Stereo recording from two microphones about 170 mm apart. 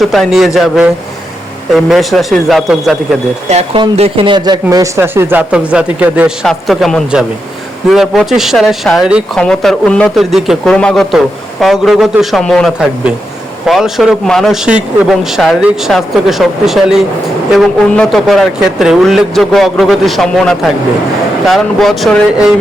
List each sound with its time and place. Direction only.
0.0 s a man's voice: centre (ahead or behind)
3.5 s a man's voice: 35° right (ahead or behind); by 22.5 s centre (ahead or behind)